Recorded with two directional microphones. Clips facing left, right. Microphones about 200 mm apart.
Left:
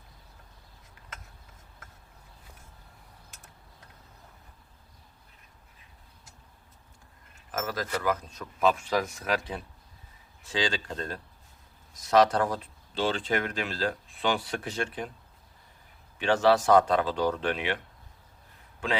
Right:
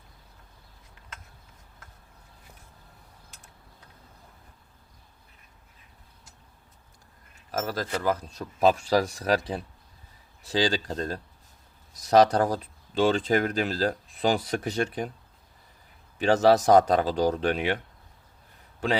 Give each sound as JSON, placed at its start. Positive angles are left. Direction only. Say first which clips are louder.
{"t": 7.5, "sound": "speech", "louder": "right 2 dB", "side_deg": -30}
{"t": 16.1, "sound": "speech", "louder": "right 3 dB", "side_deg": -40}
{"t": 18.8, "sound": "speech", "louder": "right 4 dB", "side_deg": -40}